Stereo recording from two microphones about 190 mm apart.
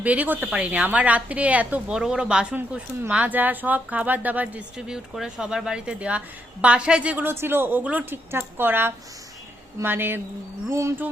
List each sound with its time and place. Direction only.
0.0 s a woman's voice: 10° right (ahead or behind)